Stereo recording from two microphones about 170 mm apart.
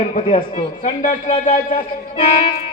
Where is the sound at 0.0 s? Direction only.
40° left (ahead or behind).